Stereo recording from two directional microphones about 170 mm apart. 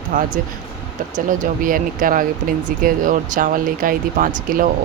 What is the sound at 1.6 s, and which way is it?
Speech, 55° right (ahead or behind).